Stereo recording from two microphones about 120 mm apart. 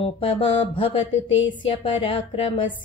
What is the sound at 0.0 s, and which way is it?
Mantra, 50° left (ahead or behind).